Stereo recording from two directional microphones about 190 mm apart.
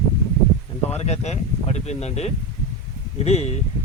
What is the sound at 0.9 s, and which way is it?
Speech, 35° left (ahead or behind).